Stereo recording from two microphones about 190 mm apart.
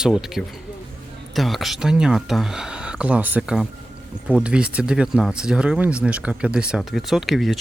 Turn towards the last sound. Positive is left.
turn(degrees=0)  # may be behind; listen again after turning